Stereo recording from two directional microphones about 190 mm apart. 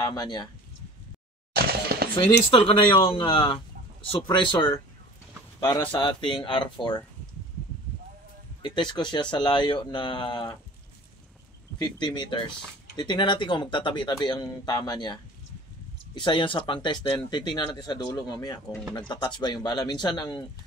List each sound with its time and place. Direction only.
0.0 s speech: 20° left (ahead or behind)
1.5 s a sound: 55° right (ahead or behind)
2.5 s speech: 30° left (ahead or behind)
8.6 s speech: 25° left (ahead or behind)
11.8 s speech: 25° left (ahead or behind)
16.2 s speech: 25° left (ahead or behind)